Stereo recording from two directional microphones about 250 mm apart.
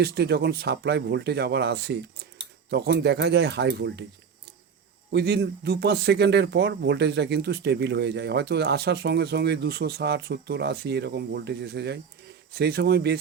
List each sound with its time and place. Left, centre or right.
0.0 s speech: right
5.1 s speech: right